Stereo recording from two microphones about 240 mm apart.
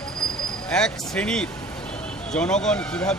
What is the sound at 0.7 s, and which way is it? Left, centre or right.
Speech, centre.